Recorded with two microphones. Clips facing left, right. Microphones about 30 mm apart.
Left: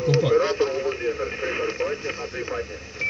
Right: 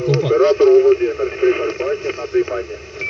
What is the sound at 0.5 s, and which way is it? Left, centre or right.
Speech, right.